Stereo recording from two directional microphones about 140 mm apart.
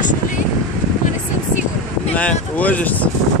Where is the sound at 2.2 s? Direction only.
10° left (ahead or behind).